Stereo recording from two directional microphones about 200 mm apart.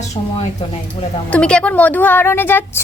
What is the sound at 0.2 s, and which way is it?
Speech, 30° left (ahead or behind).